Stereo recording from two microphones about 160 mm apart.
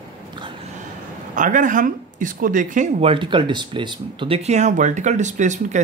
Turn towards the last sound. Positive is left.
turn(degrees=-50)  # may be behind; listen again after turning